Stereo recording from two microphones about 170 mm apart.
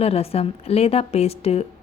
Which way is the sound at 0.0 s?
35° left (ahead or behind).